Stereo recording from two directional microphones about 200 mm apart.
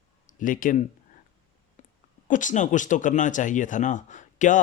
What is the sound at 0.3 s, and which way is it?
Speech, 40° left (ahead or behind).